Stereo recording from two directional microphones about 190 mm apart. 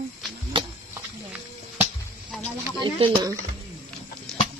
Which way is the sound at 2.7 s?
25° right (ahead or behind).